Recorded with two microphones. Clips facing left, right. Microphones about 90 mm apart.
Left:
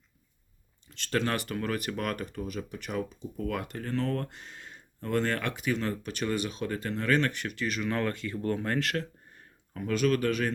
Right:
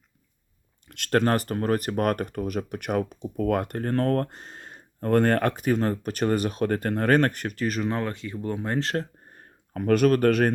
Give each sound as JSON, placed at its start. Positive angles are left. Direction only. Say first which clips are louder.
{"t": 0.9, "sound": "speech", "louder": "right 7 dB", "side_deg": -60}
{"t": 7.9, "sound": "speech", "louder": "right 2 dB", "side_deg": -20}